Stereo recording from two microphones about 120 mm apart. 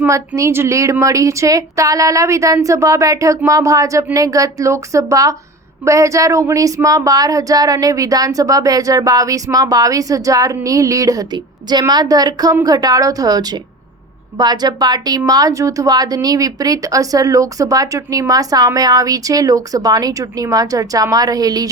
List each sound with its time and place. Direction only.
0.1 s speech: 25° right (ahead or behind)